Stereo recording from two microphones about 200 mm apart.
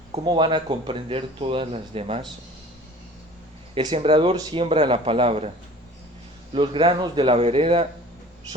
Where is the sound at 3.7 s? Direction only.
25° right (ahead or behind).